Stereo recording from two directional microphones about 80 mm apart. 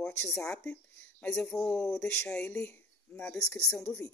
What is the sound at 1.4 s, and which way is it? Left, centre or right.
Speech, centre.